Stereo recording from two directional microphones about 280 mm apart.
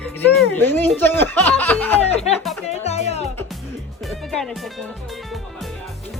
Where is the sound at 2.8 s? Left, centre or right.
Left.